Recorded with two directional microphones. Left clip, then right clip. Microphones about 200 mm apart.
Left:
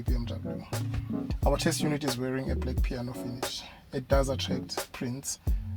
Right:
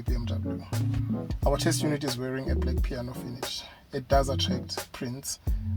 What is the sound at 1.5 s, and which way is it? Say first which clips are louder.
Speech: right 1 dB; 20° left (ahead or behind).